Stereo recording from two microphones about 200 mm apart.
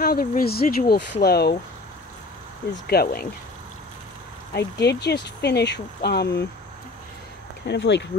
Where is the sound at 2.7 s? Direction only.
45° left (ahead or behind).